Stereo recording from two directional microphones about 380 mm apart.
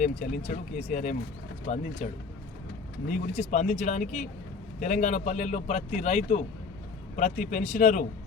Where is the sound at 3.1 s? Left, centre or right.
Centre.